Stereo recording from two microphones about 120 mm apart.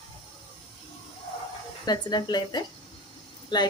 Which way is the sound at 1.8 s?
35° left (ahead or behind).